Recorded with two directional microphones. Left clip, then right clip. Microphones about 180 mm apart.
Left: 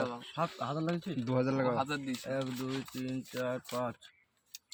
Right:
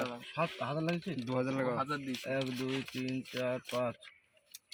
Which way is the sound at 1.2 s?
65° left (ahead or behind).